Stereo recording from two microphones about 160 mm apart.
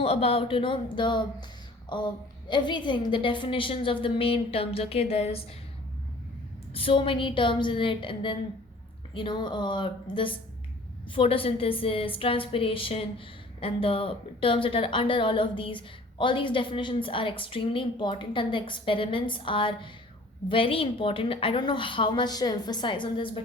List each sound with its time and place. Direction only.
0.0 s a woman's voice: 35° left (ahead or behind)
6.7 s a woman's voice: 35° left (ahead or behind)